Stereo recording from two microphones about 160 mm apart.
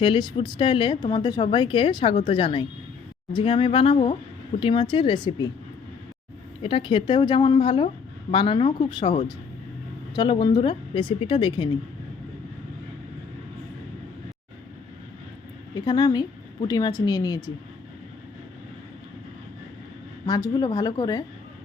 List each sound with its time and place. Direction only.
0.0 s a woman's voice: 30° left (ahead or behind)
6.6 s a woman's voice: 35° left (ahead or behind)
10.2 s a woman's voice: 30° left (ahead or behind)
15.7 s a woman's voice: 25° left (ahead or behind)
20.2 s a woman's voice: 25° left (ahead or behind)